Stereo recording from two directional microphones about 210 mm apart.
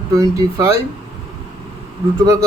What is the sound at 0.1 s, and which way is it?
Speech, 15° right (ahead or behind).